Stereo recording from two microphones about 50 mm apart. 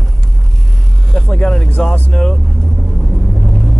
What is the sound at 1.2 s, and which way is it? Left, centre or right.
Speech, centre.